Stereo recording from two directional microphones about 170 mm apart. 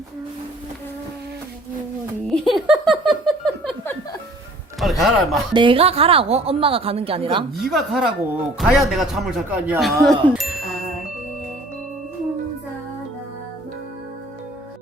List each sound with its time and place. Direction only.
2.2 s a sound: centre (ahead or behind)
4.8 s a man's voice: centre (ahead or behind)
5.5 s a woman's voice: 30° right (ahead or behind)
7.5 s speech: centre (ahead or behind)
10.0 s music: centre (ahead or behind)